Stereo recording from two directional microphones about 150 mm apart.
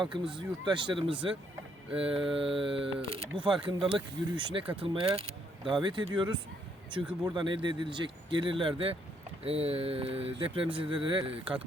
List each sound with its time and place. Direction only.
0.3 s speech: 30° right (ahead or behind)
7.3 s speech: 30° right (ahead or behind)